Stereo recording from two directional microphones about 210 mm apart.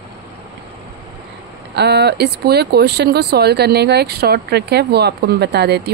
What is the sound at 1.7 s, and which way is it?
Speech, 50° right (ahead or behind).